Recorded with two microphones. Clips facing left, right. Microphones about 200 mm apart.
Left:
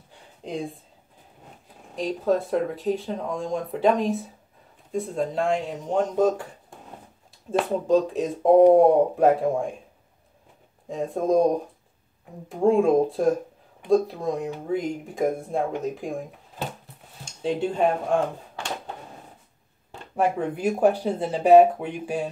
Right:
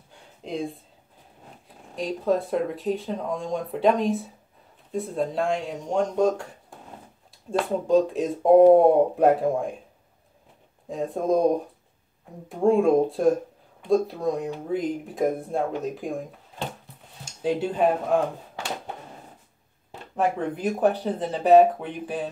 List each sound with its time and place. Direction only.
0.4 s speech: centre (ahead or behind)
2.0 s speech: centre (ahead or behind)
7.4 s speech: centre (ahead or behind)
10.9 s speech: centre (ahead or behind)
20.2 s speech: 10° left (ahead or behind)